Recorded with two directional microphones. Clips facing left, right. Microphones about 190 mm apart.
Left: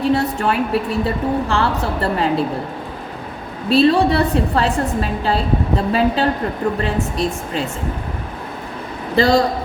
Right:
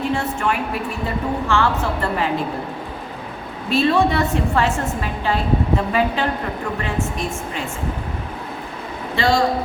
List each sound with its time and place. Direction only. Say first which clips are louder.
0.1 s a woman's voice: left 4 dB; 35° left (ahead or behind)
3.7 s a woman's voice: left 4 dB; 35° left (ahead or behind)
9.1 s a woman's voice: left 5 dB; 35° left (ahead or behind)